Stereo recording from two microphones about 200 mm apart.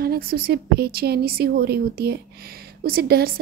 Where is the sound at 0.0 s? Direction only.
50° right (ahead or behind).